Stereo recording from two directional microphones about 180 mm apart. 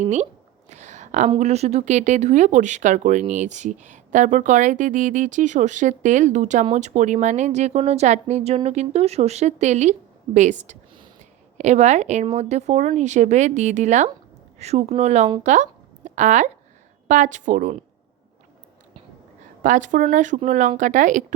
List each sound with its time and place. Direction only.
0.0 s speech: 40° right (ahead or behind)
0.7 s a sound: 40° right (ahead or behind)
1.3 s speech: 35° right (ahead or behind)
11.5 s speech: 40° right (ahead or behind)
15.4 s a sound: 40° right (ahead or behind)
17.1 s speech: 45° right (ahead or behind)
19.6 s speech: 45° right (ahead or behind)